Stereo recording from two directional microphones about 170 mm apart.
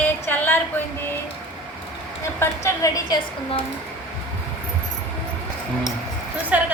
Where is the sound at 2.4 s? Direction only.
15° left (ahead or behind).